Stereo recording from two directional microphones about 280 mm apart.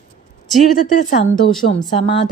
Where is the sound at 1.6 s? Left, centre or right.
Left.